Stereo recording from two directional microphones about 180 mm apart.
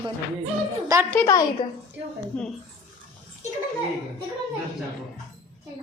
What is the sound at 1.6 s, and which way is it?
Speech, 25° left (ahead or behind).